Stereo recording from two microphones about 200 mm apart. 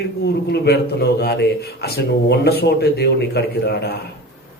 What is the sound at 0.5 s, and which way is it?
Speech, 55° left (ahead or behind).